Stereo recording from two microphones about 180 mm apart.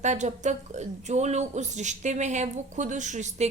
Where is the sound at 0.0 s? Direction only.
40° right (ahead or behind).